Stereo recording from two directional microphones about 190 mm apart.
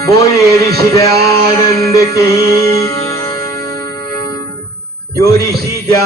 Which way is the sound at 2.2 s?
15° left (ahead or behind).